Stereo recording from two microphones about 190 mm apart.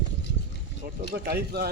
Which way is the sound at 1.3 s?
55° right (ahead or behind).